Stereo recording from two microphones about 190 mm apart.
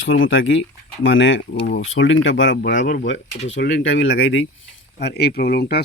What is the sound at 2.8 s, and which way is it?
Speech, 45° left (ahead or behind).